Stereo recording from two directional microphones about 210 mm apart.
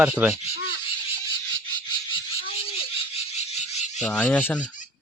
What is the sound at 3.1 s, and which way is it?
Frog, 30° left (ahead or behind).